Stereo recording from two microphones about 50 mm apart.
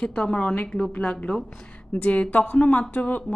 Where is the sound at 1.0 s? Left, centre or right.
Centre.